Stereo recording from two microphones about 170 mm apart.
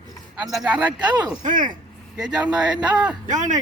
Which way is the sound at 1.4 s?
50° right (ahead or behind).